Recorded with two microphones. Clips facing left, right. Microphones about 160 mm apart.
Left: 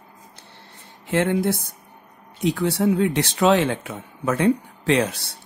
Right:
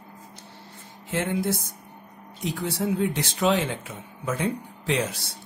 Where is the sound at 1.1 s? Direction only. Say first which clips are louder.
Left 5 dB; 65° left (ahead or behind).